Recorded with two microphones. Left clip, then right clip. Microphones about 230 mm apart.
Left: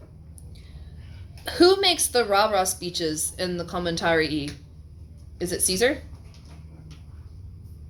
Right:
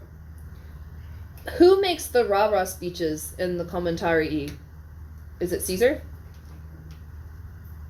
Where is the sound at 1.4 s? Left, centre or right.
Left.